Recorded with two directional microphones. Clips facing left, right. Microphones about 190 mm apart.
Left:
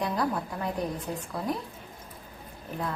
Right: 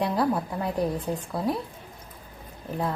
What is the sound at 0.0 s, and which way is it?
Speech, 30° right (ahead or behind).